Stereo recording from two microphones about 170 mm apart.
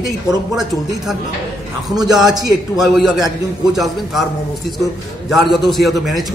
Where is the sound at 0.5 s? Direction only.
Centre (ahead or behind).